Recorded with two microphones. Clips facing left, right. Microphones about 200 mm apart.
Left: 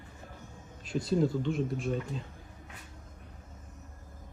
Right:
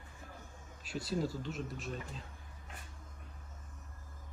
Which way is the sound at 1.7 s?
Centre (ahead or behind).